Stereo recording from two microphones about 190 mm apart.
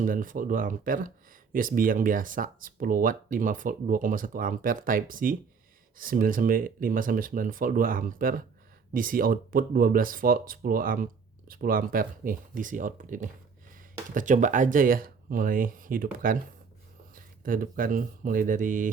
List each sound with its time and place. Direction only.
0.0 s speech: 45° right (ahead or behind)